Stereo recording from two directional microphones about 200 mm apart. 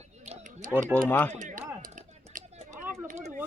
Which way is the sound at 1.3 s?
40° right (ahead or behind).